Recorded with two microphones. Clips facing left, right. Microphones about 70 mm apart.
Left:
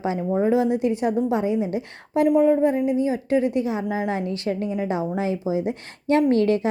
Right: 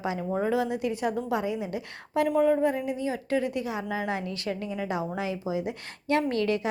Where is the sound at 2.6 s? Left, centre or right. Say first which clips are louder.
Left 7 dB; left.